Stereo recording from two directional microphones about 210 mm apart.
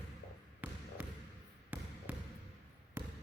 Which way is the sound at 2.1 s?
5° right (ahead or behind).